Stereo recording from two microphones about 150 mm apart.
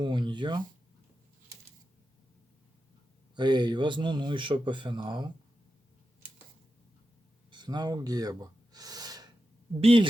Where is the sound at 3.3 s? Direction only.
30° right (ahead or behind).